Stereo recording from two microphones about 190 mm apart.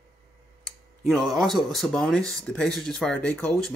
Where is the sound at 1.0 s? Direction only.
Centre (ahead or behind).